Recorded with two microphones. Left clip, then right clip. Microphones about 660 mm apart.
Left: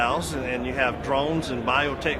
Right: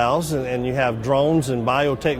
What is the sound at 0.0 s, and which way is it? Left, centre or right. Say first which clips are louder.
Speech: right 5 dB; right.